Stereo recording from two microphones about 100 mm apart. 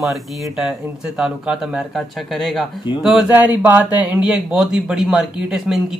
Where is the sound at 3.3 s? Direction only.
15° right (ahead or behind).